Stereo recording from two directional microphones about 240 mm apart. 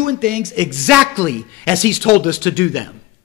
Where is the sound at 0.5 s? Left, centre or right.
Centre.